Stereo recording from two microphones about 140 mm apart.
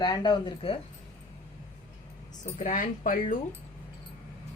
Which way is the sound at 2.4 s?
65° left (ahead or behind).